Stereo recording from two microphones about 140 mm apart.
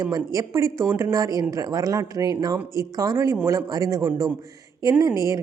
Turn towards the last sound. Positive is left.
turn(degrees=-25)  # may be behind; listen again after turning